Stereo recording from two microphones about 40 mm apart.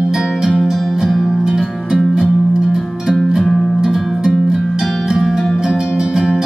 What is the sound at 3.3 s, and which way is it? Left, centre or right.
Music, centre.